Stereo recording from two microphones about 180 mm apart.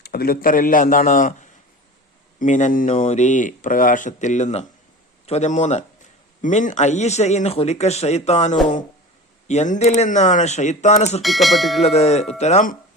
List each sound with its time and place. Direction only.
0.0 s speech: 60° left (ahead or behind); by 11.2 s 40° left (ahead or behind)
11.2 s speech: centre (ahead or behind)
11.9 s speech: 35° left (ahead or behind)